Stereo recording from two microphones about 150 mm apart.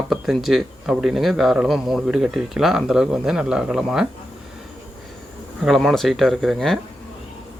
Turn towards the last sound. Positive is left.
turn(degrees=0)  # may be behind; listen again after turning